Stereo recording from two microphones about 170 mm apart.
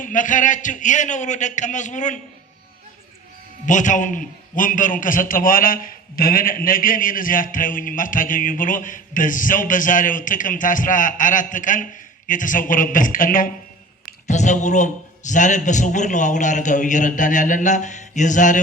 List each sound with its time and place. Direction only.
0.0 s a man's voice: 50° left (ahead or behind)
3.7 s a man's voice: 45° left (ahead or behind)